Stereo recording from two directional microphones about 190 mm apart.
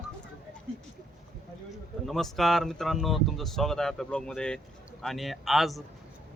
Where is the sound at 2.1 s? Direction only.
Centre (ahead or behind).